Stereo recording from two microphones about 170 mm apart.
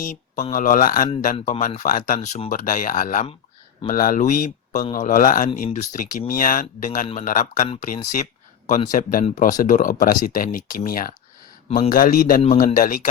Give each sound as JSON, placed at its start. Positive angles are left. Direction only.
{"t": 0.0, "sound": "speech", "side_deg": 55}